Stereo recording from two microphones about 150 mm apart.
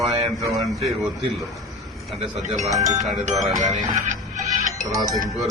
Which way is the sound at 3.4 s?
Centre (ahead or behind).